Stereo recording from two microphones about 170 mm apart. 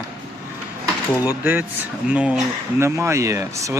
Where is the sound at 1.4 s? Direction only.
10° right (ahead or behind).